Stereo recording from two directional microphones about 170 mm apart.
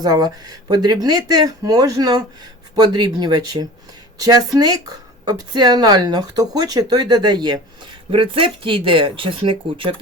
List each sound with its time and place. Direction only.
0.0 s speech: 25° right (ahead or behind)